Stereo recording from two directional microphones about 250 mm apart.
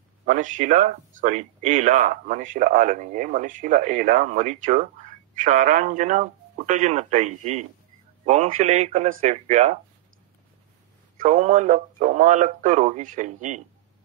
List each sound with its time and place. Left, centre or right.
0.2 s speech: right
11.1 s speech: right